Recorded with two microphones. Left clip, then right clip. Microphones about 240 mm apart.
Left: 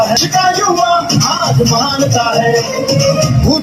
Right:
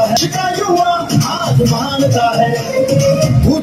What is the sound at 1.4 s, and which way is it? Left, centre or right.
Music, centre.